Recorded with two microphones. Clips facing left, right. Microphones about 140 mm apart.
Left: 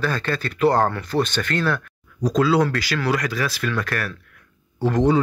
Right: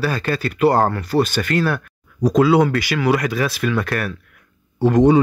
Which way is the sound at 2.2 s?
20° right (ahead or behind).